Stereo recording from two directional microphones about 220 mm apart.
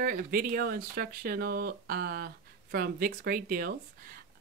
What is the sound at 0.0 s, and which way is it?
Speech, 40° right (ahead or behind).